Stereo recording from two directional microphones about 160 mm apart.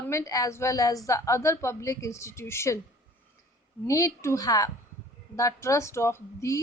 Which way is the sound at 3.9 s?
20° left (ahead or behind).